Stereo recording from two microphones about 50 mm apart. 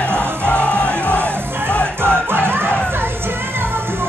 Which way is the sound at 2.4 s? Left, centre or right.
Right.